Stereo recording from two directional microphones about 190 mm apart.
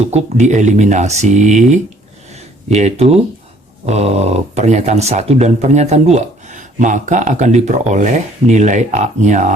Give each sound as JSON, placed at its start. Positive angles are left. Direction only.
{"t": 0.0, "sound": "speech", "side_deg": -35}
{"t": 2.3, "sound": "a sound", "side_deg": -35}
{"t": 3.8, "sound": "speech", "side_deg": -35}